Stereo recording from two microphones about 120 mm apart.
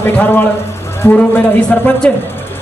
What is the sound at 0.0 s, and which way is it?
Speech, 15° left (ahead or behind).